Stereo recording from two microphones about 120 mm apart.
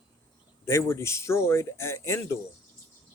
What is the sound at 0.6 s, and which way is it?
Speech, 20° left (ahead or behind).